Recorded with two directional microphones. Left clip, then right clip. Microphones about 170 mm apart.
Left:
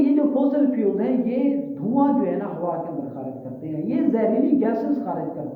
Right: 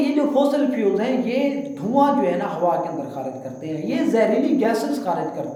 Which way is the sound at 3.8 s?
15° right (ahead or behind).